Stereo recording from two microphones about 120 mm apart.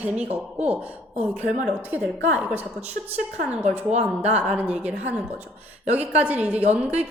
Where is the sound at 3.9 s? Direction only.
65° right (ahead or behind).